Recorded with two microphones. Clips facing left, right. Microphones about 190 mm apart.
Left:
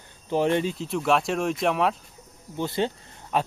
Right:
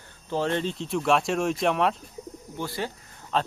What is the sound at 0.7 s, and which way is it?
Speech, centre (ahead or behind).